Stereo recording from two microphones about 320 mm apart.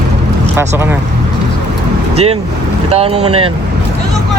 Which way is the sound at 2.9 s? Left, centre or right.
Centre.